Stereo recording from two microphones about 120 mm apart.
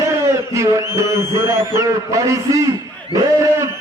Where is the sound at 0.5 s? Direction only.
25° right (ahead or behind).